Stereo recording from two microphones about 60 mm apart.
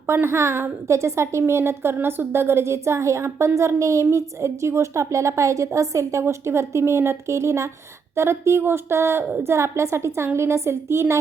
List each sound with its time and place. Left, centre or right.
0.1 s a woman's voice: right
6.2 s a woman's voice: right